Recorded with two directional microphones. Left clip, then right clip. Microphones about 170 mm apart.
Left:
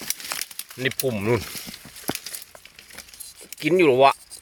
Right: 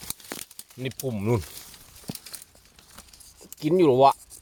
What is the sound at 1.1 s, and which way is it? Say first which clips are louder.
Speech: left 3 dB; centre (ahead or behind).